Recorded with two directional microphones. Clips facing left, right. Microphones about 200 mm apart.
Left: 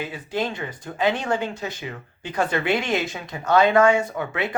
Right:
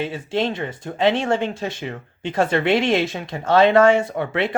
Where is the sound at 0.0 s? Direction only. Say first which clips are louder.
Right 4 dB; 25° right (ahead or behind).